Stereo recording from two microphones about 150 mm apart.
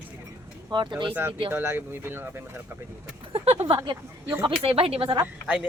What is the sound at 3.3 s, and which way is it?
Speech, 40° right (ahead or behind).